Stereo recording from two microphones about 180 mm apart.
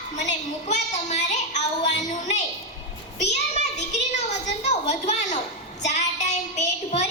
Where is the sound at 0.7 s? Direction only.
40° left (ahead or behind).